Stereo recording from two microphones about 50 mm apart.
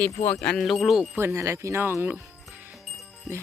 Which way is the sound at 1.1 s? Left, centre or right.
Right.